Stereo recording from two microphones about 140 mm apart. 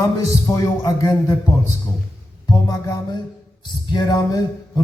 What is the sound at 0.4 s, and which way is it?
A man's voice, 25° left (ahead or behind).